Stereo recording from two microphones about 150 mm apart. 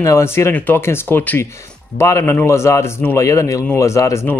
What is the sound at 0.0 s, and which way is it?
A man's voice, 20° left (ahead or behind).